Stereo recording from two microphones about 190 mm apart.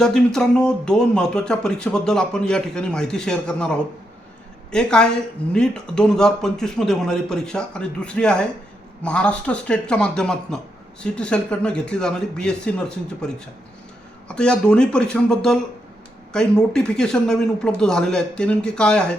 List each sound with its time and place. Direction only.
0.0 s speech: 5° left (ahead or behind)
14.3 s speech: 5° left (ahead or behind)